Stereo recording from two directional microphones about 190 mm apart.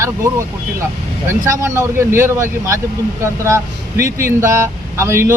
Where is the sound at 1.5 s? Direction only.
15° right (ahead or behind).